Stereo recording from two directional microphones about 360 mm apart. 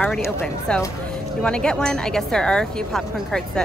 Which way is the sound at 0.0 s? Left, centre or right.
Centre.